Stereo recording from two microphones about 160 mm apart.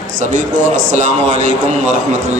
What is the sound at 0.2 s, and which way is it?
A man's voice, 50° right (ahead or behind).